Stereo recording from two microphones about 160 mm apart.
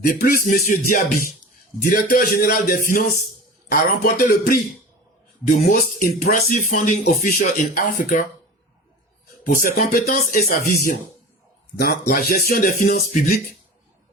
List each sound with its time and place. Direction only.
0.1 s speech: 60° left (ahead or behind)
7.0 s speech: 70° left (ahead or behind)
9.6 s speech: 60° left (ahead or behind)
11.8 s speech: 70° left (ahead or behind)